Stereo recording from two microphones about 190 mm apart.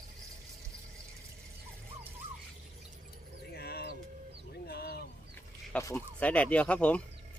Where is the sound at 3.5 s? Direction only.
55° left (ahead or behind).